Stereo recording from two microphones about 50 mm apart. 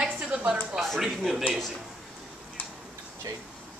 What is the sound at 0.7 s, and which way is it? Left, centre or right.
Speech, centre.